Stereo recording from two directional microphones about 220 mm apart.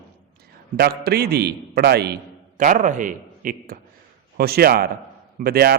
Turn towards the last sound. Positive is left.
turn(degrees=-45)  # may be behind; listen again after turning